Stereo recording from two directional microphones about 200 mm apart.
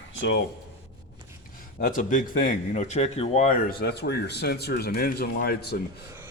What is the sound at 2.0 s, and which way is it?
Speech, 40° left (ahead or behind).